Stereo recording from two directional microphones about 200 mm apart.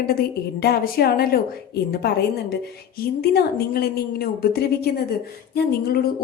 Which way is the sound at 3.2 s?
50° left (ahead or behind).